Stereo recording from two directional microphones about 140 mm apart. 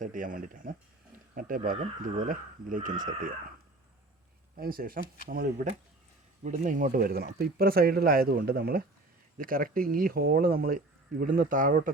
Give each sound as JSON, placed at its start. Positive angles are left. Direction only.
{"t": 0.0, "sound": "speech", "side_deg": -70}
{"t": 4.5, "sound": "speech", "side_deg": -90}
{"t": 6.4, "sound": "speech", "side_deg": -65}